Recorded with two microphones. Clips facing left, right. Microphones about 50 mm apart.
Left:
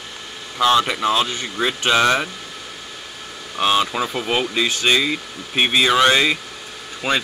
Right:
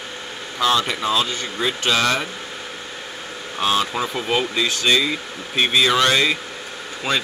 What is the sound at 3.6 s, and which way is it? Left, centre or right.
Speech, left.